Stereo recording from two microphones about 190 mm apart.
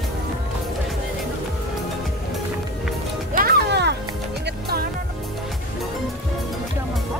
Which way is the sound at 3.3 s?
55° right (ahead or behind).